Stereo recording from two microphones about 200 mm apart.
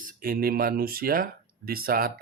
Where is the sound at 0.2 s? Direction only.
50° right (ahead or behind).